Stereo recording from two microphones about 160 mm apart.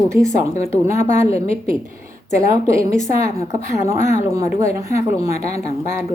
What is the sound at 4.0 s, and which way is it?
Speech, 45° left (ahead or behind).